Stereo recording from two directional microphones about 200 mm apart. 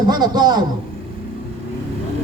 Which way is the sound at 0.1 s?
20° right (ahead or behind).